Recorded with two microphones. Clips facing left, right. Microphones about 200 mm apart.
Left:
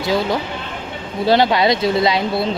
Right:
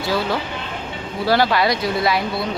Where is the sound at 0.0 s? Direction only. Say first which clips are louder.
Left 3 dB; 20° left (ahead or behind).